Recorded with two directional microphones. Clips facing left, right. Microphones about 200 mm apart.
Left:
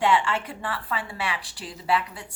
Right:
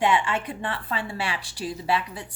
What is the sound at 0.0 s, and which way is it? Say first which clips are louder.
A woman's voice: even; 15° right (ahead or behind).